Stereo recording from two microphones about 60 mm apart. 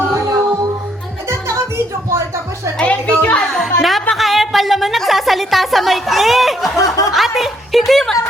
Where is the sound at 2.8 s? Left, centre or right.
Left.